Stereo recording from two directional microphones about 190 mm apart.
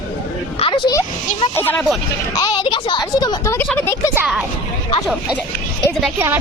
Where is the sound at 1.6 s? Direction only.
10° left (ahead or behind).